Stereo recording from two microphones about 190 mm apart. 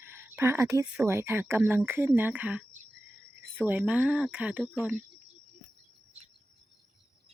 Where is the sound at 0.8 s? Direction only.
15° right (ahead or behind).